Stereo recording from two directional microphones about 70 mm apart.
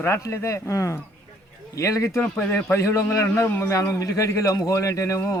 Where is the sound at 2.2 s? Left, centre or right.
Left.